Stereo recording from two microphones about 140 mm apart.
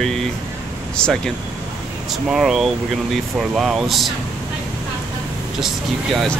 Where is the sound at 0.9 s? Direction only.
5° left (ahead or behind).